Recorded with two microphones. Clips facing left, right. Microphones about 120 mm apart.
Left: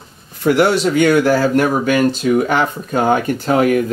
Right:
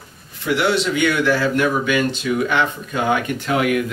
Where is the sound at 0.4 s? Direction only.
45° left (ahead or behind).